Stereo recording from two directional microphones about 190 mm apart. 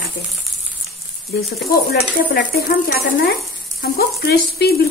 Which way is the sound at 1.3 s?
55° left (ahead or behind).